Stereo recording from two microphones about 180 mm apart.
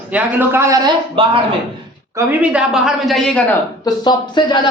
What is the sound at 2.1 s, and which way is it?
A man's voice, 5° right (ahead or behind).